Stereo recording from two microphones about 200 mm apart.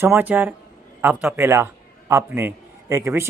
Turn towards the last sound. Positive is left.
turn(degrees=-10)  # may be behind; listen again after turning